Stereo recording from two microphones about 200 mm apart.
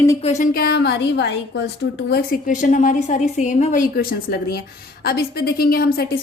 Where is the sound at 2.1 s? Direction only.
50° left (ahead or behind).